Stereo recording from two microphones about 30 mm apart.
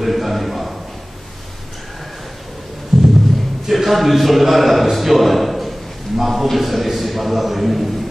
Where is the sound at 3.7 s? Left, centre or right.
Centre.